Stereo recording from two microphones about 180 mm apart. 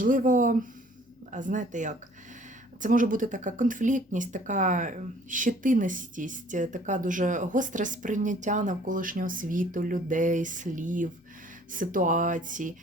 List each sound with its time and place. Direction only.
0.0 s speech: 50° right (ahead or behind)